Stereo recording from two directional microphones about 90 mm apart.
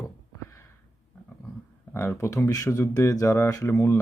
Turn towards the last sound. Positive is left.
turn(degrees=30)  # may be behind; listen again after turning